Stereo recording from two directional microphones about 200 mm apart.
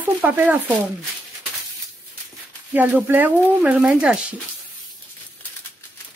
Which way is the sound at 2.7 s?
10° right (ahead or behind).